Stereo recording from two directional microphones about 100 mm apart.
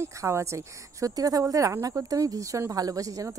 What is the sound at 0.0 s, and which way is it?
Speech, 30° right (ahead or behind).